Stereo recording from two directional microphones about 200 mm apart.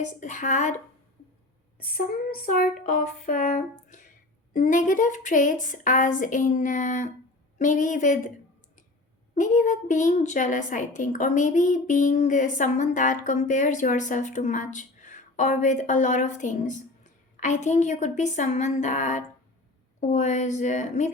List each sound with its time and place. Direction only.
0.0 s a woman's voice: 40° left (ahead or behind)
1.8 s a sound: 45° left (ahead or behind)
4.5 s a woman's voice: 40° left (ahead or behind)
9.3 s a woman's voice: 40° left (ahead or behind)